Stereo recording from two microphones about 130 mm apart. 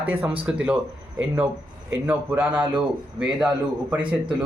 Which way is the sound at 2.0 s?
15° right (ahead or behind).